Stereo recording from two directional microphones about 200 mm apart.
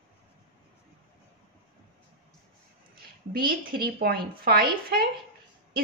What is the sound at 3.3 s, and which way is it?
A woman's voice, 45° right (ahead or behind).